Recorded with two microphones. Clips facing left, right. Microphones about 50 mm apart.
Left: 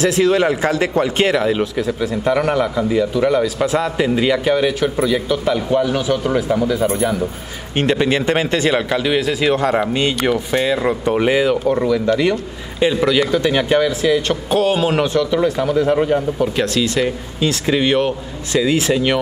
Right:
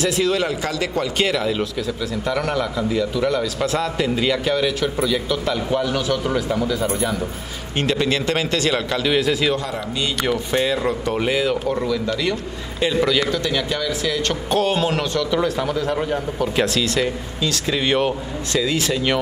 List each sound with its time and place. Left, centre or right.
0.0 s a man's voice: left; by 9.4 s centre
9.6 s speech: left
10.2 s a man's voice: centre
10.9 s a man's voice: left
13.2 s a man's voice: left
16.5 s a man's voice: centre
16.8 s a man's voice: centre
17.8 s a man's voice: centre
18.5 s a man's voice: centre